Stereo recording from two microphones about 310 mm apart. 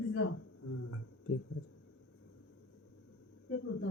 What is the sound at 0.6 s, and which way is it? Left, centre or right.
Speech, left.